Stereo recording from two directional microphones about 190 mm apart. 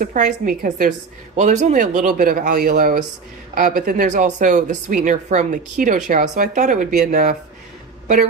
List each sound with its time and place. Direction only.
0.0 s a woman's voice: 45° right (ahead or behind)